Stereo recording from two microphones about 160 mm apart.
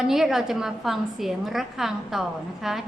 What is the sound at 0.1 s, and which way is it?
A woman's voice, 5° right (ahead or behind).